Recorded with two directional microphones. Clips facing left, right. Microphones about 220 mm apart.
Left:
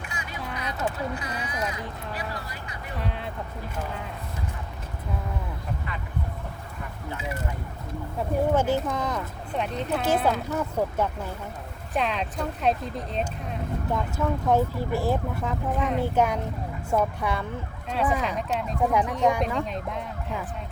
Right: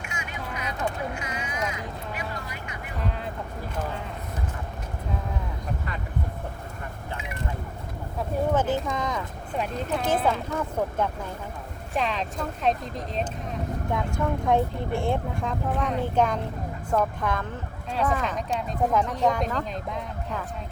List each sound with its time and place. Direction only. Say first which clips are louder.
0.1 s a sound: even; 35° left (ahead or behind)
1.1 s speech: left 1 dB; 35° left (ahead or behind)
8.5 s speech: left 1 dB; 10° left (ahead or behind)